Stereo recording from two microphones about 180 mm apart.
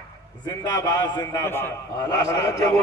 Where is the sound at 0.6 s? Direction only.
20° left (ahead or behind).